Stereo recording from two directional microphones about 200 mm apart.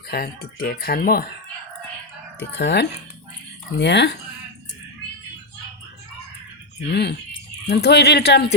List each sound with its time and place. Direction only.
0.1 s speech: 50° left (ahead or behind)
2.4 s speech: 60° left (ahead or behind)
6.9 s speech: 55° left (ahead or behind)